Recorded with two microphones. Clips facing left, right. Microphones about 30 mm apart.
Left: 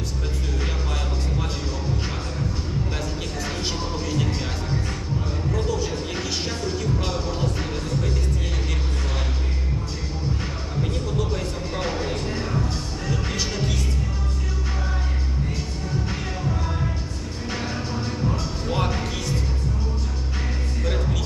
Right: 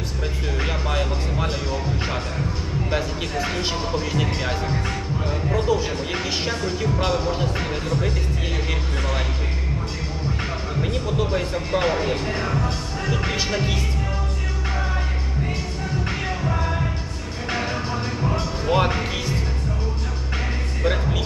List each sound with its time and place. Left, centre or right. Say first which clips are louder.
0.6 s music: right 8 dB; right
2.9 s speech: right 5 dB; right
7.1 s speech: right 4 dB; right
10.8 s speech: right 3 dB; right
12.4 s music: right 2 dB; right
16.0 s music: right 3 dB; right
17.5 s music: right 4 dB; right
18.6 s speech: right 6 dB; right
20.8 s music: right 5 dB; right